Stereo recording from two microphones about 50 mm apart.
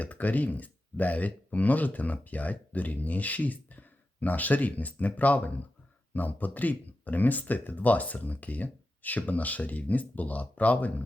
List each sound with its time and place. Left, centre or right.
0.0 s speech: left